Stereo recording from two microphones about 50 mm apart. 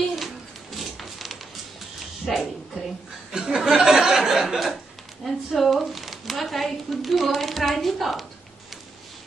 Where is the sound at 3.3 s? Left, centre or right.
Centre.